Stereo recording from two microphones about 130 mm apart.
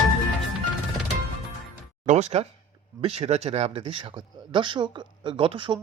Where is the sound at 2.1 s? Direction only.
60° right (ahead or behind).